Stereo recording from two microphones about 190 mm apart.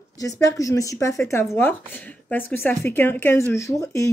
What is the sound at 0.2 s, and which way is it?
Speech, 15° left (ahead or behind).